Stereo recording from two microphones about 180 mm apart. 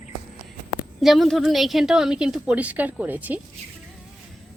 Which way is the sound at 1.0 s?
Centre (ahead or behind).